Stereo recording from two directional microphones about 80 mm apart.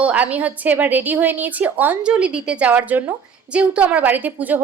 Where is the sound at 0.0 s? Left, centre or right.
Centre.